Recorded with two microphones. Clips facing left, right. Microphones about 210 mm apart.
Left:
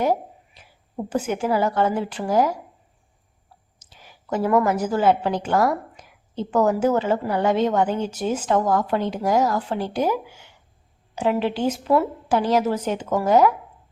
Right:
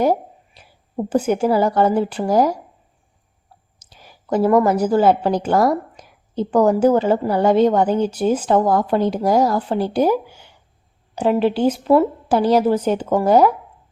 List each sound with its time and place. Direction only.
0.0 s a sound: 35° right (ahead or behind)
1.3 s a woman's voice: 35° right (ahead or behind)
3.8 s a woman's voice: 40° right (ahead or behind)